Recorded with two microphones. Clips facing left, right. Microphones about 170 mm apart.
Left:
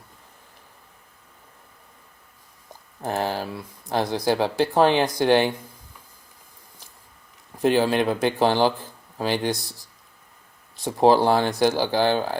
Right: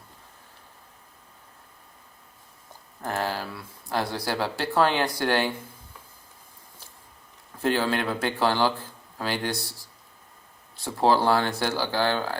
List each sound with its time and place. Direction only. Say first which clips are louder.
3.0 s speech: left 3 dB; 20° left (ahead or behind)
7.6 s speech: left 5 dB; 15° left (ahead or behind)
10.8 s speech: left 5 dB; 15° left (ahead or behind)